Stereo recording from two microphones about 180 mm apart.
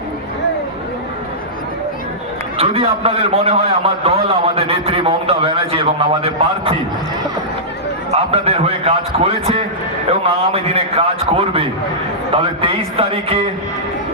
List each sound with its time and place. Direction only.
2.6 s a man's voice: 30° right (ahead or behind)
8.1 s a man's voice: 35° right (ahead or behind)